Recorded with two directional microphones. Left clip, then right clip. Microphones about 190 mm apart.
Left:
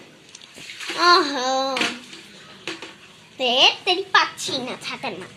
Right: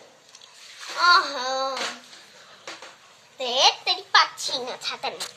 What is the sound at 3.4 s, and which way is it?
Babbling, 5° left (ahead or behind).